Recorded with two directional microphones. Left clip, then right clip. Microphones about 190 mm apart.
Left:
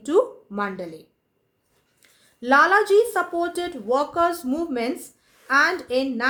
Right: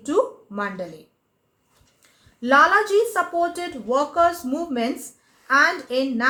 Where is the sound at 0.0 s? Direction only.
45° left (ahead or behind).